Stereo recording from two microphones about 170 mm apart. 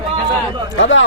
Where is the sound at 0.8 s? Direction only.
90° left.